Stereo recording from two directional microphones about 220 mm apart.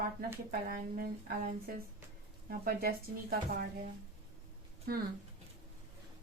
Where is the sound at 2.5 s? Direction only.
45° right (ahead or behind).